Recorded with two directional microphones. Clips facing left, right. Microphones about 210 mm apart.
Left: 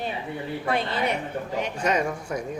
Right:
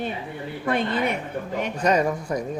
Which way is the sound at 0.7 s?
50° right (ahead or behind).